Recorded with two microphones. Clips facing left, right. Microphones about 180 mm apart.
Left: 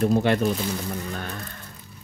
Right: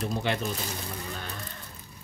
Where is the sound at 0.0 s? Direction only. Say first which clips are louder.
Left 9 dB; 55° left (ahead or behind).